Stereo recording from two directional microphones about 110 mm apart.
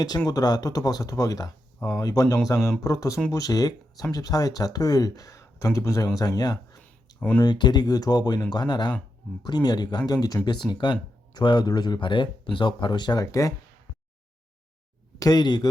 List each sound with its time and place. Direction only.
0.3 s speech: 35° left (ahead or behind)
2.6 s speech: centre (ahead or behind)
2.8 s speech: 30° left (ahead or behind)
7.2 s speech: 15° left (ahead or behind)
7.4 s speech: 40° left (ahead or behind)
15.2 s speech: 40° left (ahead or behind)